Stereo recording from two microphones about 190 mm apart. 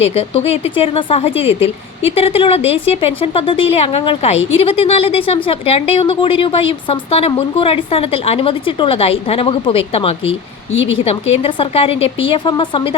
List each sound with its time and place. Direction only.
0.0 s a woman's voice: 35° left (ahead or behind)
10.7 s a woman's voice: 85° left
11.0 s a woman's voice: 30° left (ahead or behind)